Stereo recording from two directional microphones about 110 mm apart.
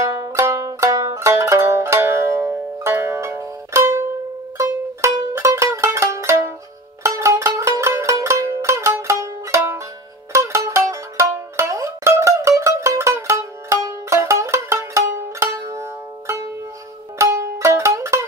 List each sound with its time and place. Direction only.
0.0 s music: 30° right (ahead or behind)
5.3 s music: 25° right (ahead or behind)